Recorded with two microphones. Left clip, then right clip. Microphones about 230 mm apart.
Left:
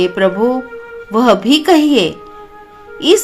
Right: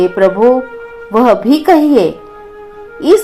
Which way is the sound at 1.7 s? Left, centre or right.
Left.